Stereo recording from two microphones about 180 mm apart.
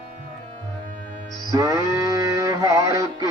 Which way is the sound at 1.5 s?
20° right (ahead or behind).